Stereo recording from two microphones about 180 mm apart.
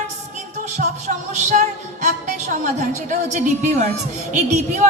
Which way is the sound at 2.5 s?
45° right (ahead or behind).